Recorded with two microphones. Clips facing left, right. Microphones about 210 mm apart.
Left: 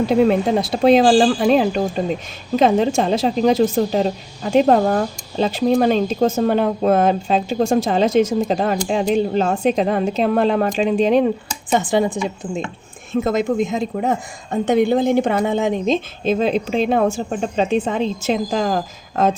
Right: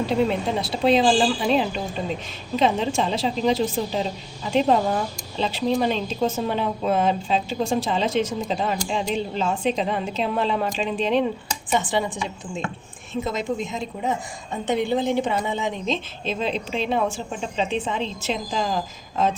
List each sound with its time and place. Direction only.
0.3 s a woman's voice: 50° left (ahead or behind)